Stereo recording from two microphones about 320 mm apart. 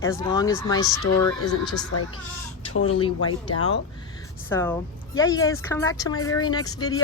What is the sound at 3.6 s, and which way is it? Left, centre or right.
Speech, left.